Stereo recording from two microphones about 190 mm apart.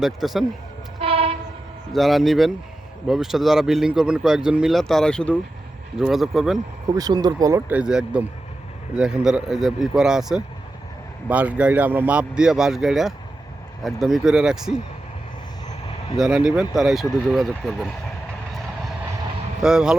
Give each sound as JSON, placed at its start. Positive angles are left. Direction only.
{"t": 0.0, "sound": "speech", "side_deg": 0}
{"t": 0.9, "sound": "train", "side_deg": -30}
{"t": 1.9, "sound": "speech", "side_deg": 0}
{"t": 6.9, "sound": "speech", "side_deg": -20}
{"t": 7.7, "sound": "speech", "side_deg": -5}
{"t": 16.1, "sound": "speech", "side_deg": -5}
{"t": 19.6, "sound": "speech", "side_deg": -5}